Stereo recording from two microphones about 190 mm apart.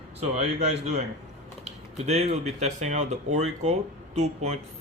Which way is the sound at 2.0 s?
35° right (ahead or behind).